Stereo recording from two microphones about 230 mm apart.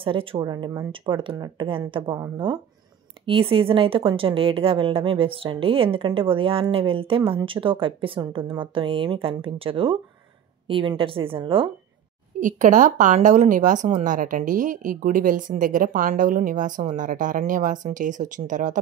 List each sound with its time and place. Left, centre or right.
0.0 s a woman's voice: right
12.4 s speech: right